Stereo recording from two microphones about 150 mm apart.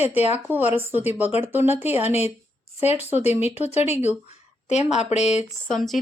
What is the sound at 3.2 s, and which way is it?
A woman's voice, 45° left (ahead or behind).